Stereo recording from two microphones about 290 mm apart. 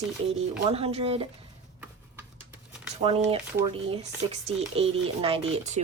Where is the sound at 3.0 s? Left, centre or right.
Centre.